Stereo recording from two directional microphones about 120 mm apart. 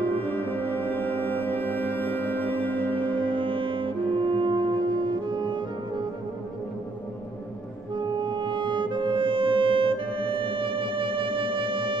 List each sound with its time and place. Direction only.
0.2 s music: 15° left (ahead or behind)
3.0 s music: 45° right (ahead or behind)
7.9 s music: 40° right (ahead or behind)